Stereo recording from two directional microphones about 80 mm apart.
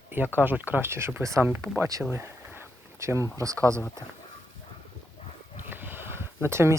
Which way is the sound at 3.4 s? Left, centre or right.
Right.